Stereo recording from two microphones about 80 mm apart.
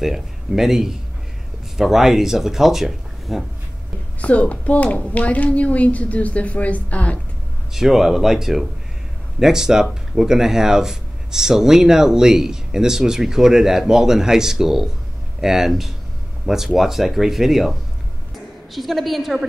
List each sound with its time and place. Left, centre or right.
0.0 s speech: centre
4.2 s speech: centre
7.7 s speech: centre